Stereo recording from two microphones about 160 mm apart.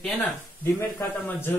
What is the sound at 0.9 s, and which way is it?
Speech, 15° left (ahead or behind).